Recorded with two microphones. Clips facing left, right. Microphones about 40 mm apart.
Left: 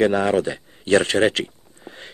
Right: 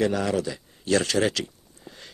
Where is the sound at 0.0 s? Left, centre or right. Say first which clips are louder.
Left 6 dB; left.